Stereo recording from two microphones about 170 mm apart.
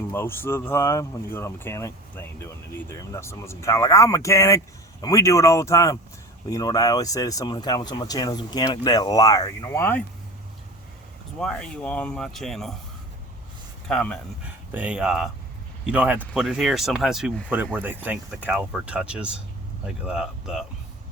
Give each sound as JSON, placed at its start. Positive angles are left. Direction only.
{"t": 0.1, "sound": "speech", "side_deg": 15}
{"t": 11.3, "sound": "speech", "side_deg": 5}
{"t": 13.8, "sound": "speech", "side_deg": 5}
{"t": 14.7, "sound": "speech", "side_deg": -10}